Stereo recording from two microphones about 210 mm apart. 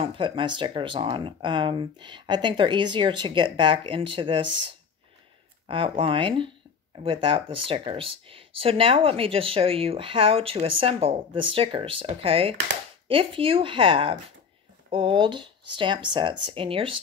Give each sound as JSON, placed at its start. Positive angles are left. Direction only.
{"t": 0.0, "sound": "speech", "side_deg": -25}
{"t": 5.7, "sound": "speech", "side_deg": -25}